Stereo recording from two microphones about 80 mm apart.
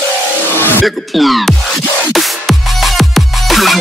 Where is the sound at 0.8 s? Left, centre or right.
Centre.